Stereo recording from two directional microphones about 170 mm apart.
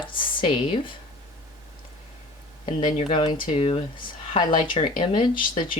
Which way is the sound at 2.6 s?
30° left (ahead or behind).